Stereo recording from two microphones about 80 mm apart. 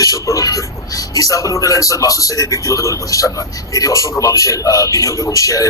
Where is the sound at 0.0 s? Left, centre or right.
Left.